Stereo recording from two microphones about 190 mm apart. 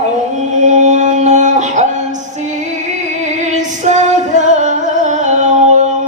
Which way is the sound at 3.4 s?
40° right (ahead or behind).